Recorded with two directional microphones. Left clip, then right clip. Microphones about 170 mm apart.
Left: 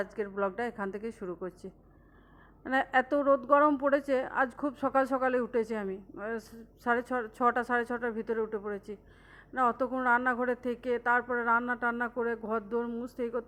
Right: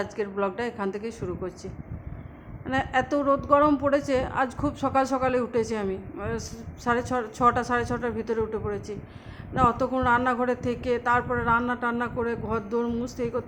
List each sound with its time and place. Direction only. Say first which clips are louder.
0.0 s a woman's voice: right 4 dB; 30° left (ahead or behind)
2.6 s a woman's voice: right 2 dB; 50° left (ahead or behind)